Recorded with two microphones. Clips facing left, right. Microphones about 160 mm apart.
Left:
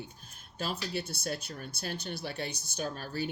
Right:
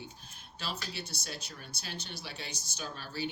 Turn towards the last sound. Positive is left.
turn(degrees=50)  # may be behind; listen again after turning